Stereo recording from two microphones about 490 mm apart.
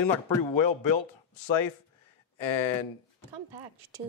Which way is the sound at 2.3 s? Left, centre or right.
Left.